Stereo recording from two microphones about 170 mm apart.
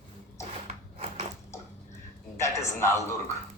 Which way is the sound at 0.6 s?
40° right (ahead or behind).